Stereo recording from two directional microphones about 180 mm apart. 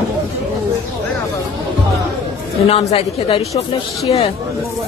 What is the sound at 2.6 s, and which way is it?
A woman's voice, 35° left (ahead or behind).